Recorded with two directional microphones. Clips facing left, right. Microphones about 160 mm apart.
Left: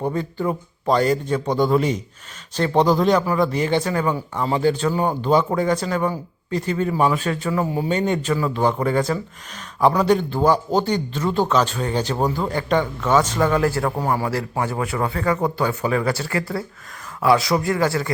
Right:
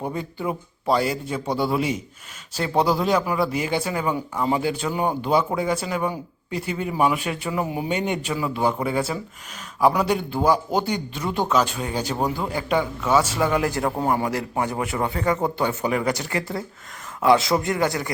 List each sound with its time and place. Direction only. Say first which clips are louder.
0.1 s a man's voice: left 4 dB; 10° right (ahead or behind)